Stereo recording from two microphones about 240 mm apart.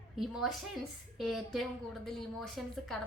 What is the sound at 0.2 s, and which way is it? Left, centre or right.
A woman's voice, centre.